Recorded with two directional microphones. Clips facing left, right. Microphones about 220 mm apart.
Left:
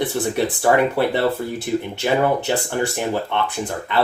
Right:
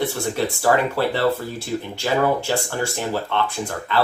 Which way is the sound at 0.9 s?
20° left (ahead or behind).